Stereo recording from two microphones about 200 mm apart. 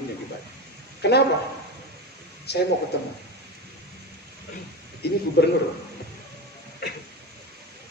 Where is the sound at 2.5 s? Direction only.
55° left (ahead or behind).